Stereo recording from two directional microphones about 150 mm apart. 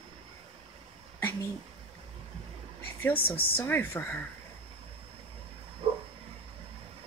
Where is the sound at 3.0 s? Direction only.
15° left (ahead or behind).